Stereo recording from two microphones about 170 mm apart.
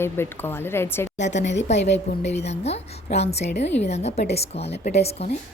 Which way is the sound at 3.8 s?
40° left (ahead or behind).